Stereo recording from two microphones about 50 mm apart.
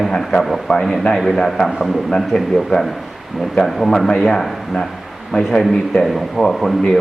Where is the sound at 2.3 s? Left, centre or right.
Centre.